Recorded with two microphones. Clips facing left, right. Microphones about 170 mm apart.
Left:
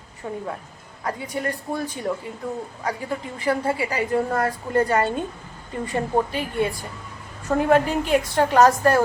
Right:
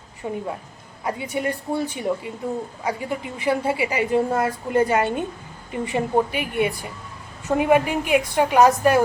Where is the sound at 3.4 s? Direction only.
20° right (ahead or behind).